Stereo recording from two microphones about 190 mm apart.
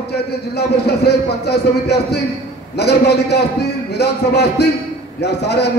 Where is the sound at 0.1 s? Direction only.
60° left (ahead or behind).